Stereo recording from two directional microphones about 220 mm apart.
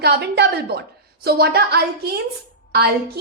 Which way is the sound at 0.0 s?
50° right (ahead or behind).